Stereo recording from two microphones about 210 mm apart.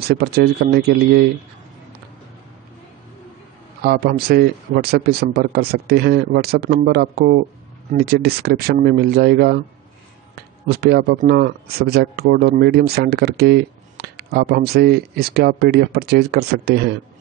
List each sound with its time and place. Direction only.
0.0 s speech: 50° right (ahead or behind)
3.8 s speech: 50° right (ahead or behind)